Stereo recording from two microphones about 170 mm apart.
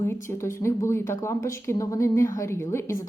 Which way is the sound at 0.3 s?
15° left (ahead or behind).